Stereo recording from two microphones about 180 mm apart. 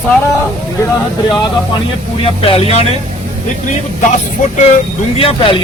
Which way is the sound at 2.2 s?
30° left (ahead or behind).